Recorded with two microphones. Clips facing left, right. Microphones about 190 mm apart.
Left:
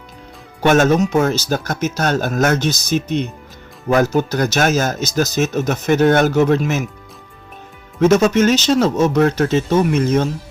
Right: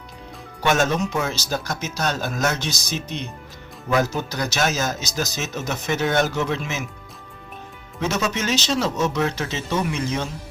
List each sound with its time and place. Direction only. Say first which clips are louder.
0.6 s speech: left 7 dB; 50° left (ahead or behind)
7.9 s speech: left 12 dB; 50° left (ahead or behind)